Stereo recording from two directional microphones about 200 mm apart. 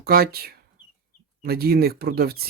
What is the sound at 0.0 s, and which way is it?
Speech, 50° right (ahead or behind).